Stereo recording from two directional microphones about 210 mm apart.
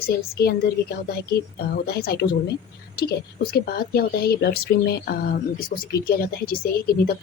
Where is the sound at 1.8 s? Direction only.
50° left (ahead or behind).